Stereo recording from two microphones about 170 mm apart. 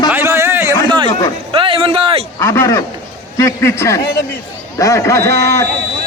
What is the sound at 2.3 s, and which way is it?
A man's voice, 15° left (ahead or behind).